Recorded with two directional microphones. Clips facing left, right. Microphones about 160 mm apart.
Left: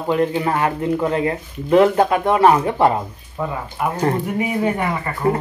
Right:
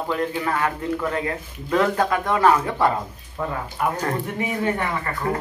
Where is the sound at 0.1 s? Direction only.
25° left (ahead or behind).